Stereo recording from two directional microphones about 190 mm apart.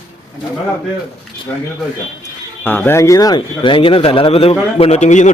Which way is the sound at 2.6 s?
10° left (ahead or behind).